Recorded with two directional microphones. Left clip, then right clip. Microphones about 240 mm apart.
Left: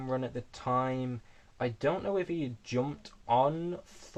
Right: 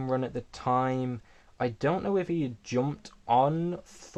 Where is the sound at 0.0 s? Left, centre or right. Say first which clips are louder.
Right 4 dB; right.